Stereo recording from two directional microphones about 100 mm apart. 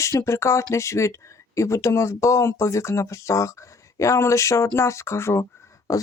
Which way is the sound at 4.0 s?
30° left (ahead or behind).